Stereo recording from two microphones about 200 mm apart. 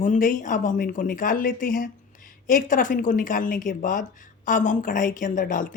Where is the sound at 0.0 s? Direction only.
40° left (ahead or behind).